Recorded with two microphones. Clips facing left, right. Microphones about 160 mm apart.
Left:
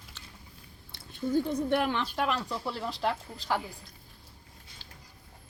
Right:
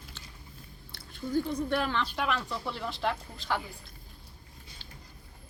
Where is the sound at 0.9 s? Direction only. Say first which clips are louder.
Left 2 dB; 20° left (ahead or behind).